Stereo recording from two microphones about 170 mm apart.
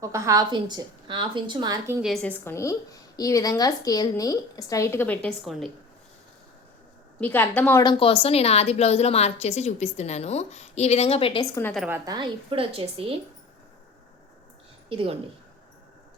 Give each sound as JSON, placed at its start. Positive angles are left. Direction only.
{"t": 0.0, "sound": "a woman's voice", "side_deg": -20}
{"t": 2.0, "sound": "a woman's voice", "side_deg": 0}
{"t": 2.4, "sound": "speech", "side_deg": 15}
{"t": 7.2, "sound": "a woman's voice", "side_deg": 10}
{"t": 7.8, "sound": "a woman's voice", "side_deg": 30}
{"t": 11.9, "sound": "a woman's voice", "side_deg": -10}
{"t": 12.1, "sound": "a woman's voice", "side_deg": -30}
{"t": 14.8, "sound": "a woman's voice", "side_deg": -30}